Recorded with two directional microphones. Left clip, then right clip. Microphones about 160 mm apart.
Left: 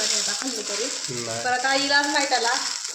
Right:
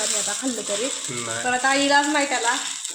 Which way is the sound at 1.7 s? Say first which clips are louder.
Right 3 dB; 50° right (ahead or behind).